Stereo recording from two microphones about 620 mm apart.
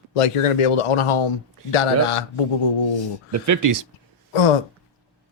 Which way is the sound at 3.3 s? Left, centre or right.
Right.